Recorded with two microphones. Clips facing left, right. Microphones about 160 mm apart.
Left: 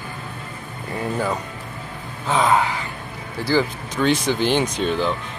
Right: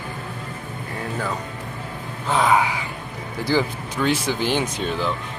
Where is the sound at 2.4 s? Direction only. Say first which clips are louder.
Even; 5° right (ahead or behind).